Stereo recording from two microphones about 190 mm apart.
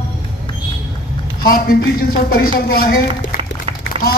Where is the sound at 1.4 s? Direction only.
50° left (ahead or behind).